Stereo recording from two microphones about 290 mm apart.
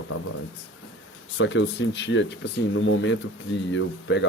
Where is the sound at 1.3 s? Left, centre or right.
Left.